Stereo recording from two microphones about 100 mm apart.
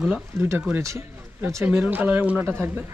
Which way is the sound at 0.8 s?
30° right (ahead or behind).